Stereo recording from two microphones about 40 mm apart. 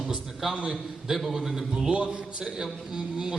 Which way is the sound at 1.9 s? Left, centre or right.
Right.